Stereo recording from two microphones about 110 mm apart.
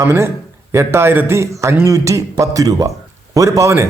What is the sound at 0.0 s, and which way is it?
A man's voice, 25° right (ahead or behind).